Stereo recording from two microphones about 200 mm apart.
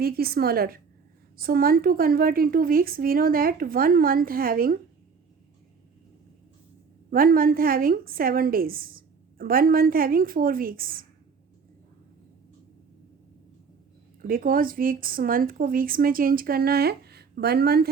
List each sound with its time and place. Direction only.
0.0 s a woman's voice: 50° right (ahead or behind)
7.1 s a woman's voice: 45° right (ahead or behind)
14.2 s a woman's voice: 45° right (ahead or behind)